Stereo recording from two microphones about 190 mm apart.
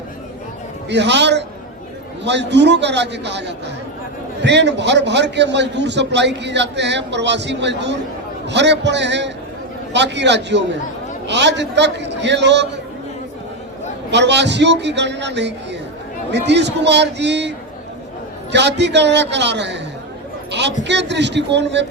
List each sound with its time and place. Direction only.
0.9 s a man's voice: 65° right (ahead or behind)
14.1 s a man's voice: 65° right (ahead or behind)
18.5 s a man's voice: 65° right (ahead or behind)